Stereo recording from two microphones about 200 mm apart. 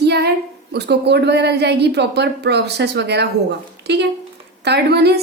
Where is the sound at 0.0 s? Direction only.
55° right (ahead or behind).